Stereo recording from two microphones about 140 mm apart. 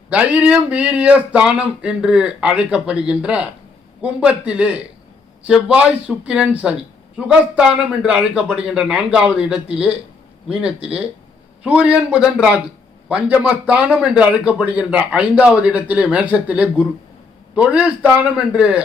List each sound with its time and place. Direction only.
0.1 s a man's voice: 10° right (ahead or behind)